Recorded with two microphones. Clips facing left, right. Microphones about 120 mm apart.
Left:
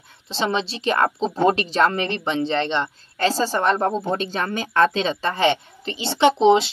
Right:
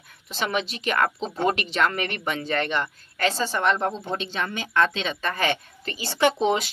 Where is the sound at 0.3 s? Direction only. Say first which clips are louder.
Left 4 dB; 30° left (ahead or behind).